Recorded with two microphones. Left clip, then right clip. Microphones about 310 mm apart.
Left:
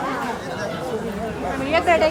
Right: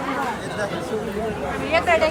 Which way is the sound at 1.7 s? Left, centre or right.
Left.